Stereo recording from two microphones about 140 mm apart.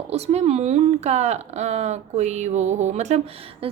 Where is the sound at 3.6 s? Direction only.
40° right (ahead or behind).